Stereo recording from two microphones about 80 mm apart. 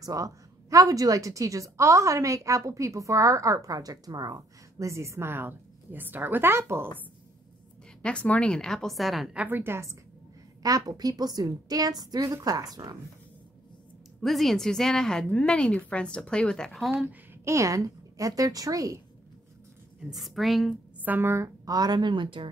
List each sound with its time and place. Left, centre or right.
0.0 s a woman's voice: right
8.0 s a woman's voice: centre
9.3 s a woman's voice: centre
9.6 s a woman's voice: right
10.6 s a woman's voice: right
14.2 s a woman's voice: centre
17.0 s a woman's voice: right
17.5 s a woman's voice: right
20.0 s a woman's voice: centre
21.0 s speech: right
21.6 s speech: right